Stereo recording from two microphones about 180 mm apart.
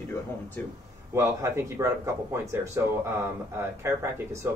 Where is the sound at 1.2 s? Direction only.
15° right (ahead or behind).